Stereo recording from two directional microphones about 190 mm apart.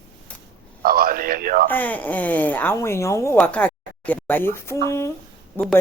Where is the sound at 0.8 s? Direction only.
50° right (ahead or behind).